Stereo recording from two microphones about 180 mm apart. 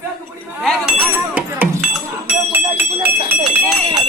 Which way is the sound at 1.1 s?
10° right (ahead or behind).